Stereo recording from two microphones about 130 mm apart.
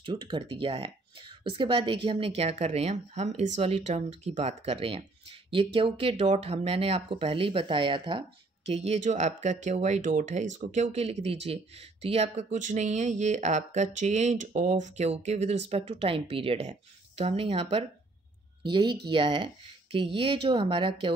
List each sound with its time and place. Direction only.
0.0 s speech: 40° right (ahead or behind)
8.6 s speech: 55° right (ahead or behind)
18.6 s speech: 40° right (ahead or behind)